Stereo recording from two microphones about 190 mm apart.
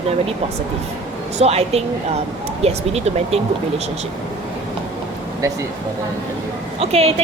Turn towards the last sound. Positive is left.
turn(degrees=-30)  # may be behind; listen again after turning